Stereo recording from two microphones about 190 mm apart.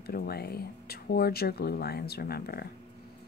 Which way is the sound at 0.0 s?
55° left (ahead or behind).